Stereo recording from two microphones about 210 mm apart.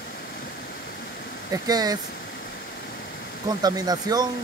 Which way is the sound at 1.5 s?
15° right (ahead or behind).